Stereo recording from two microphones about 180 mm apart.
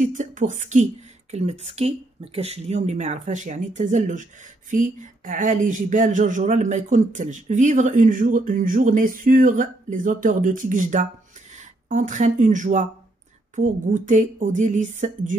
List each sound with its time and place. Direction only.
0.0 s speech: 45° right (ahead or behind)